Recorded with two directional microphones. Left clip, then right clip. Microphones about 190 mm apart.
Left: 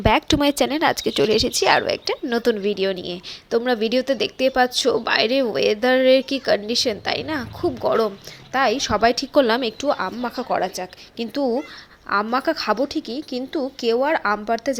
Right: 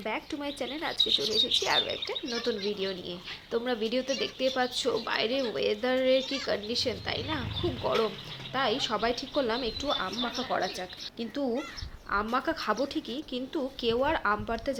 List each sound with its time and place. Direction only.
0.0 s a woman's voice: 55° left (ahead or behind); by 14.8 s 35° left (ahead or behind)